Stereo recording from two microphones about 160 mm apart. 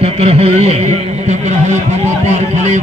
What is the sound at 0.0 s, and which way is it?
Speech, 40° right (ahead or behind).